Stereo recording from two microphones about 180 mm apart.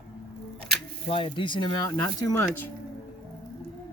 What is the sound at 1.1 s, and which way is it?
Speech, 30° left (ahead or behind).